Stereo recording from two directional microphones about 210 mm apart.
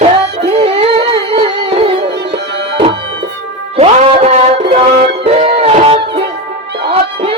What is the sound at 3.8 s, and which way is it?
Music, 30° right (ahead or behind).